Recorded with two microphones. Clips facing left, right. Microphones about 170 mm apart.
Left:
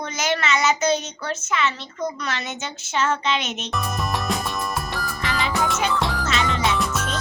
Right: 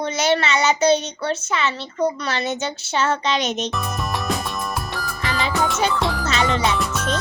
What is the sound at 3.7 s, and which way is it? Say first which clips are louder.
Music: even; centre (ahead or behind).